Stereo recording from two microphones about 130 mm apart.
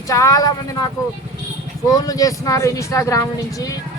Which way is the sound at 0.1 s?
25° left (ahead or behind).